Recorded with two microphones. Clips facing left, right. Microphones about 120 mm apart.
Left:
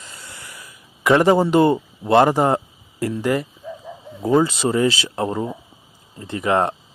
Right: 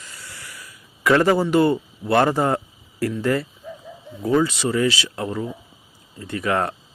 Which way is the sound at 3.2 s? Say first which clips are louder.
Left 2 dB; 15° left (ahead or behind).